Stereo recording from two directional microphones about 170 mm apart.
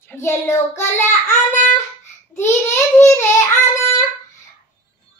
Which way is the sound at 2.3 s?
15° left (ahead or behind).